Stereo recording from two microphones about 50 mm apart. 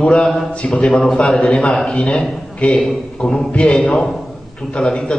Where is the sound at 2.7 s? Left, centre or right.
Centre.